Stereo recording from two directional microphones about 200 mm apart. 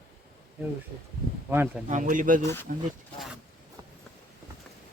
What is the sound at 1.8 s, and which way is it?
Speech, 40° right (ahead or behind).